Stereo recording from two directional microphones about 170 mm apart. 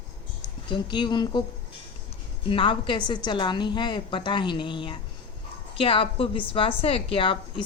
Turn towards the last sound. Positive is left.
turn(degrees=30)  # may be behind; listen again after turning